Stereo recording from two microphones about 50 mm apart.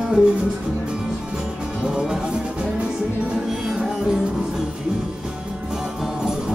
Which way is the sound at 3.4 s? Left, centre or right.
Centre.